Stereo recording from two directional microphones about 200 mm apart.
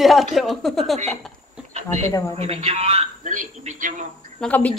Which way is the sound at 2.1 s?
15° left (ahead or behind).